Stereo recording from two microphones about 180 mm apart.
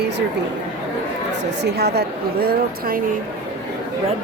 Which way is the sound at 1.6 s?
60° right (ahead or behind).